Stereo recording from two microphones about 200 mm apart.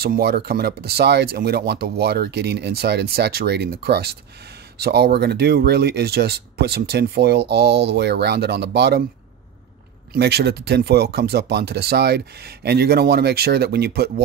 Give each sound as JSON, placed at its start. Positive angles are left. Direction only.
{"t": 0.0, "sound": "speech", "side_deg": -50}
{"t": 10.1, "sound": "speech", "side_deg": -55}